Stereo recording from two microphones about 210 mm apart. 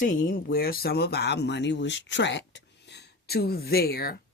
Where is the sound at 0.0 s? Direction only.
40° left (ahead or behind).